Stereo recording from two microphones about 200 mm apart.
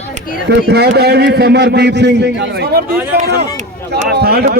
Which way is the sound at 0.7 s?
55° right (ahead or behind).